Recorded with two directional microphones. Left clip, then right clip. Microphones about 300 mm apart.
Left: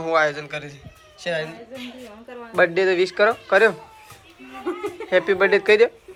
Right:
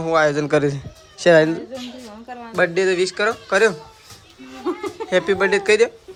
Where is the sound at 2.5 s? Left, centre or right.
Centre.